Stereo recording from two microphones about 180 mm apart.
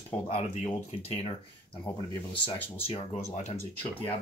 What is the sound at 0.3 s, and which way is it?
Speech, 35° left (ahead or behind).